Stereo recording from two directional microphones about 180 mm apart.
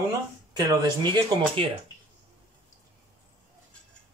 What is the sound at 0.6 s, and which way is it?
Speech, 25° right (ahead or behind).